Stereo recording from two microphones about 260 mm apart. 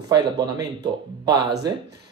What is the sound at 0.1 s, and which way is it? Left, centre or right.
Speech, centre.